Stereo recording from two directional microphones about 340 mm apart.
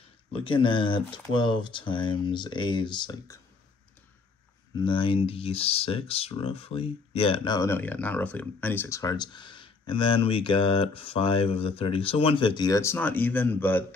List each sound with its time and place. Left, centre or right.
0.3 s speech: centre
4.7 s speech: centre